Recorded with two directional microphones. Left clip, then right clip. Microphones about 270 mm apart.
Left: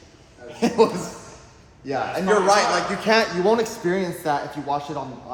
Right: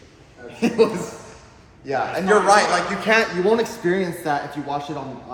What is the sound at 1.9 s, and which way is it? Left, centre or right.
A man's voice, left.